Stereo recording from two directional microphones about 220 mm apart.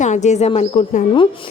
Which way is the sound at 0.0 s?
30° left (ahead or behind).